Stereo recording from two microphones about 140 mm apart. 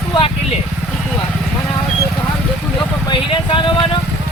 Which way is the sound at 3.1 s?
35° left (ahead or behind).